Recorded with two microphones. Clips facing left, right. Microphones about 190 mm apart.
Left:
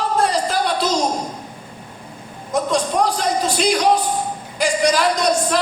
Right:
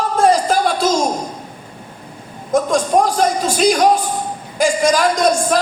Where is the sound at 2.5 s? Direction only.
45° right (ahead or behind).